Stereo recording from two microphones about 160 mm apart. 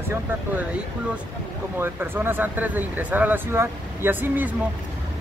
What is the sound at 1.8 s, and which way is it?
Speech, 15° right (ahead or behind).